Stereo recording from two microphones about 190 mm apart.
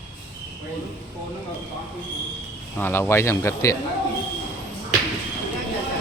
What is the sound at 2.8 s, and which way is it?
Speech, 10° left (ahead or behind).